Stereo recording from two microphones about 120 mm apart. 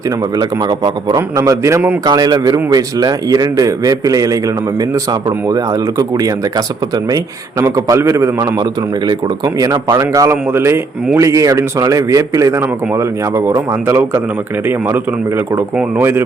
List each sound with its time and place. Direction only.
0.3 s a man's voice: 30° right (ahead or behind)
5.5 s a man's voice: 30° right (ahead or behind)
7.6 s a man's voice: 25° right (ahead or behind)
9.6 s a man's voice: 30° right (ahead or behind)
15.5 s a man's voice: 20° right (ahead or behind)